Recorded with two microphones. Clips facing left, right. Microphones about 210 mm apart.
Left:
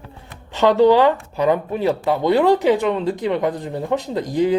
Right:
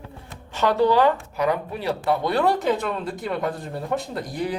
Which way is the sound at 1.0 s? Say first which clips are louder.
Left 4 dB; 25° left (ahead or behind).